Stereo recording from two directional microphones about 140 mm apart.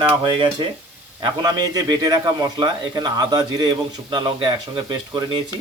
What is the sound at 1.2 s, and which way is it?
A man's voice, 30° right (ahead or behind).